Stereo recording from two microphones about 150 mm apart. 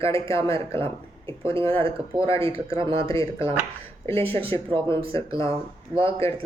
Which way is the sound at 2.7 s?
35° right (ahead or behind).